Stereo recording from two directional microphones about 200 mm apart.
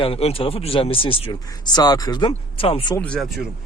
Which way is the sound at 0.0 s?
30° left (ahead or behind).